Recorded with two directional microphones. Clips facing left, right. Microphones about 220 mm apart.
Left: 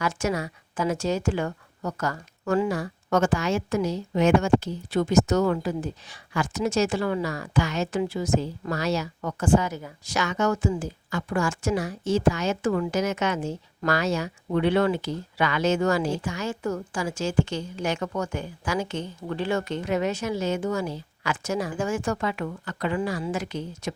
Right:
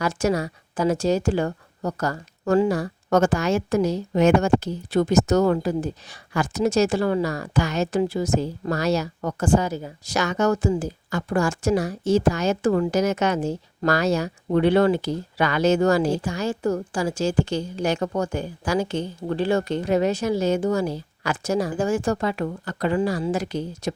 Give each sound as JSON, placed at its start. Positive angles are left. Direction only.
{"t": 0.0, "sound": "speech", "side_deg": -35}